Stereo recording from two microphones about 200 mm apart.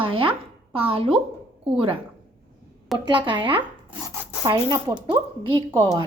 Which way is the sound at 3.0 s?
25° right (ahead or behind).